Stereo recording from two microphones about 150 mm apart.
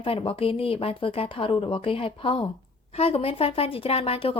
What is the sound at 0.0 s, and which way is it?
A woman's voice, 35° left (ahead or behind).